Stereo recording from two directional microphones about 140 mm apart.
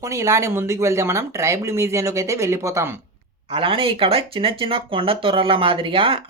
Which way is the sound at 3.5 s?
40° right (ahead or behind).